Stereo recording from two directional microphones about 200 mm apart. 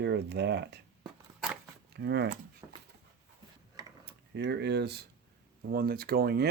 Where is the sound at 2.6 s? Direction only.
10° right (ahead or behind).